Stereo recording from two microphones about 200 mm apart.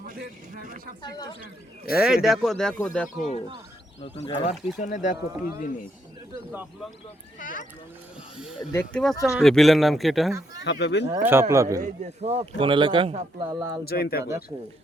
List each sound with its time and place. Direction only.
0.0 s speech: 45° right (ahead or behind)
1.0 s speech: 20° left (ahead or behind)
2.0 s speech: 5° right (ahead or behind)
3.2 s speech: 40° left (ahead or behind)
4.8 s speech: 40° left (ahead or behind)
7.3 s speech: 40° left (ahead or behind)
8.7 s speech: 10° left (ahead or behind)
10.6 s speech: 60° left (ahead or behind)
11.0 s speech: 10° right (ahead or behind)
11.8 s speech: 30° right (ahead or behind)
13.5 s speech: 15° right (ahead or behind)
13.8 s speech: 50° left (ahead or behind)